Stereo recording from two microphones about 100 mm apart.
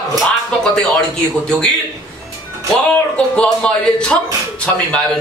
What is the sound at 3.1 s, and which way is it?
A man's voice, 10° left (ahead or behind).